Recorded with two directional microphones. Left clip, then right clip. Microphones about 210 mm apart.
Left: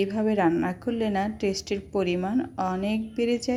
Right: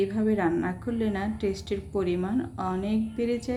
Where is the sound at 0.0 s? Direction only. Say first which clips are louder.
Left 2 dB; 30° left (ahead or behind).